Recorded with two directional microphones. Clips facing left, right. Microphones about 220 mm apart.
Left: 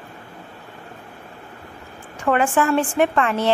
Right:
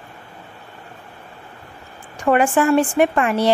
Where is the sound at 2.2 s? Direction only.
15° right (ahead or behind).